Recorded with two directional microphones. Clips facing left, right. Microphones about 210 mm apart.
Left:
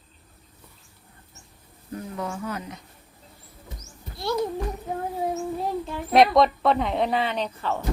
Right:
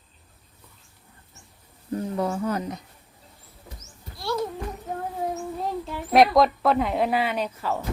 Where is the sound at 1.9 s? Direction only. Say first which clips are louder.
Right 6 dB; 35° right (ahead or behind).